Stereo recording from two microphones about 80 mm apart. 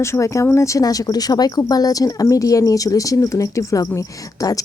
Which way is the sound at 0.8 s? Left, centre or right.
Left.